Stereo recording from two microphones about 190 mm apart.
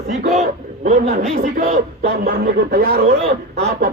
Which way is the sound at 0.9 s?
40° right (ahead or behind).